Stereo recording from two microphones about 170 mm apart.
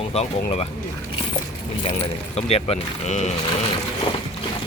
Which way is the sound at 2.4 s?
35° left (ahead or behind).